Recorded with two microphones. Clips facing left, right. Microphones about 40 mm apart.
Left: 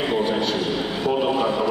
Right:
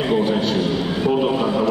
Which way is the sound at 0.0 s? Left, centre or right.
Centre.